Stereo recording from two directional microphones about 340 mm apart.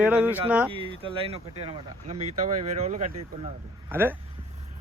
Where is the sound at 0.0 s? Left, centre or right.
Centre.